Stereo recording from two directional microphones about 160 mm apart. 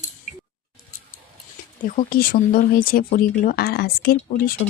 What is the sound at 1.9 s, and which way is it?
Speech, 65° left (ahead or behind).